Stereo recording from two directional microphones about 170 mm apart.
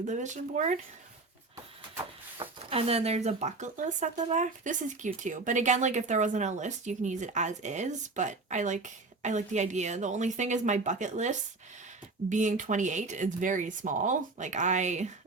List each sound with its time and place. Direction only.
0.0 s speech: 45° right (ahead or behind)
2.4 s speech: 35° right (ahead or behind)